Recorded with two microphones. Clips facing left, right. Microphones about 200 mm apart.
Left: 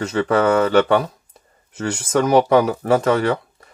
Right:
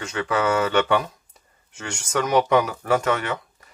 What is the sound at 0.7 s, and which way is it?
Speech, 35° left (ahead or behind).